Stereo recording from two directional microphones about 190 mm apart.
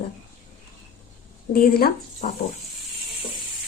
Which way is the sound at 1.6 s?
55° left (ahead or behind).